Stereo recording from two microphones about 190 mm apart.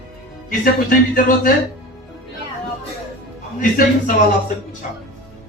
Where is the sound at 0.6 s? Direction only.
45° left (ahead or behind).